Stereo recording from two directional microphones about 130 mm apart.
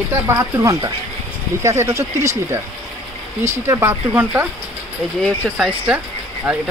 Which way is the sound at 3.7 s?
20° right (ahead or behind).